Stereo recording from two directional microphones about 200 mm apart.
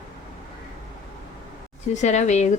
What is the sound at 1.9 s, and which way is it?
Speech, 35° left (ahead or behind).